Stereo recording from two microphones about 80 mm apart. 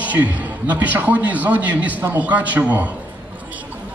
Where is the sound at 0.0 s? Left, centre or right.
Centre.